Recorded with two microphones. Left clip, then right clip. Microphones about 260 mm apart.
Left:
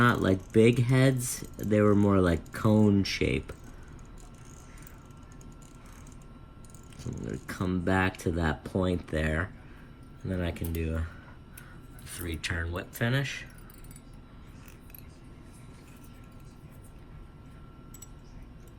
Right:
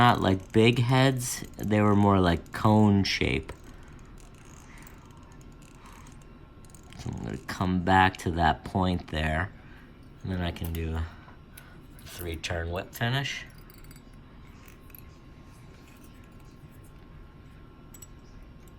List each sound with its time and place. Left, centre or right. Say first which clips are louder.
0.0 s speech: right 3 dB; centre
7.2 s speech: right 3 dB; right
12.0 s speech: even; centre